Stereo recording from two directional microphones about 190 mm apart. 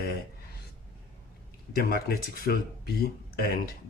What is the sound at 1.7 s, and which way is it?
Speech, 55° left (ahead or behind).